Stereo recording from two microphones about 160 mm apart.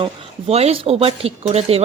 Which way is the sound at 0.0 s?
40° right (ahead or behind).